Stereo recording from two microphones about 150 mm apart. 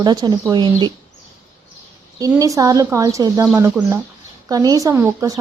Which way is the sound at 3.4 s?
10° right (ahead or behind).